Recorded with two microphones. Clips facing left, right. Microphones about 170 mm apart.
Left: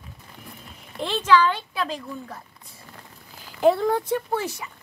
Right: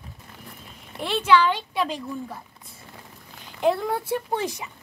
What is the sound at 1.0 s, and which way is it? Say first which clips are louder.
Speech: even; 10° right (ahead or behind).